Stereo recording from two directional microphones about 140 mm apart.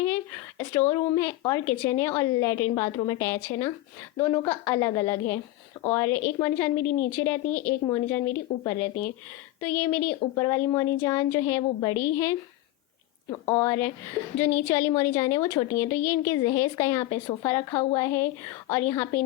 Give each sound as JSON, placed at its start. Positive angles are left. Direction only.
{"t": 0.9, "sound": "a woman's voice", "side_deg": 20}
{"t": 4.2, "sound": "a woman's voice", "side_deg": 10}
{"t": 7.9, "sound": "a woman's voice", "side_deg": 25}
{"t": 10.3, "sound": "a woman's voice", "side_deg": 25}
{"t": 13.5, "sound": "a woman's voice", "side_deg": 20}